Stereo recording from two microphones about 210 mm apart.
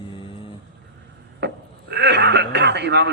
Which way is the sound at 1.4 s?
55° right (ahead or behind).